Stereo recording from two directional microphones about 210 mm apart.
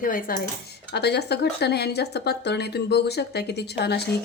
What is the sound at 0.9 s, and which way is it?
Speech, 50° left (ahead or behind).